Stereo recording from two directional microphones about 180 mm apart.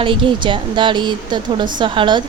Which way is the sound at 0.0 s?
30° right (ahead or behind).